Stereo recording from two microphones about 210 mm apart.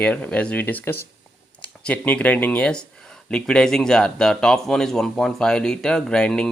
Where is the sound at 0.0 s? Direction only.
5° left (ahead or behind).